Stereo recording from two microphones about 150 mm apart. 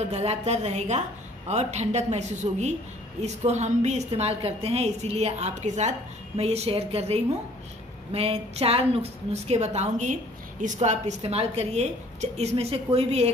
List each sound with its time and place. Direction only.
0.1 s a woman's voice: 45° right (ahead or behind)